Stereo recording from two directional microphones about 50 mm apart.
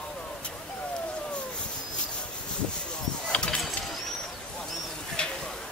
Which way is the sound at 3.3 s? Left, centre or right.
Centre.